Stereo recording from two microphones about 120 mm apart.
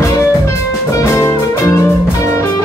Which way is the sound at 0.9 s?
25° left (ahead or behind).